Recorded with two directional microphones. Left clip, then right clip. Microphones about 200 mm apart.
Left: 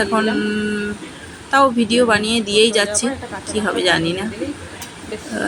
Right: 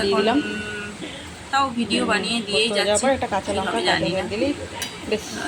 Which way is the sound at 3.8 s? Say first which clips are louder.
Left 5 dB; 15° left (ahead or behind).